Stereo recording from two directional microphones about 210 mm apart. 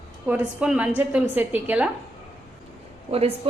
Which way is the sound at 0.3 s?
5° right (ahead or behind).